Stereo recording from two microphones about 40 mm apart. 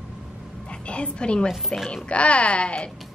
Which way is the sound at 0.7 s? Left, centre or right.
Left.